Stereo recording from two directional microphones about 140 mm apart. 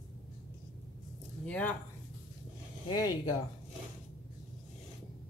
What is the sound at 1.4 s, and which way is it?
Speech, 10° left (ahead or behind).